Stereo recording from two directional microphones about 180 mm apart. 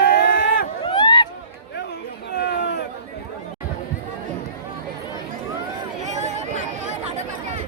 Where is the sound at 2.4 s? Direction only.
65° left (ahead or behind).